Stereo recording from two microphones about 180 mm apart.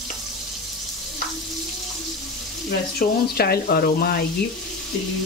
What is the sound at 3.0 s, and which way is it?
Speech, 60° left (ahead or behind).